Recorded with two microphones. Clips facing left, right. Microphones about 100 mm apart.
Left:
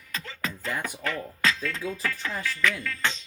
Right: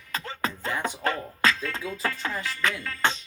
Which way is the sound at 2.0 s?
35° right (ahead or behind).